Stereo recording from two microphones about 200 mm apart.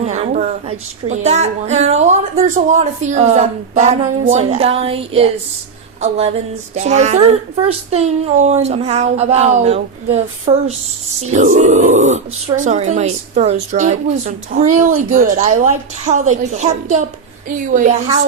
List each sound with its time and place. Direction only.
0.0 s a woman's voice: 35° right (ahead or behind)